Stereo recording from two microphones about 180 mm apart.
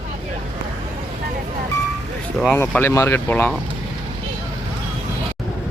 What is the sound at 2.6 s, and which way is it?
Speech, 10° left (ahead or behind).